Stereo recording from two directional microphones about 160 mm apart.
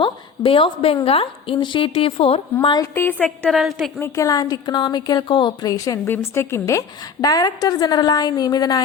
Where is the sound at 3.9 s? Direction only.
15° left (ahead or behind).